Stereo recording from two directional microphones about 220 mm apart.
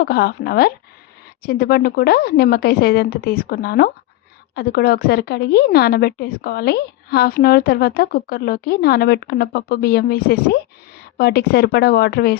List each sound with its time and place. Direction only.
0.0 s a woman's voice: 45° left (ahead or behind)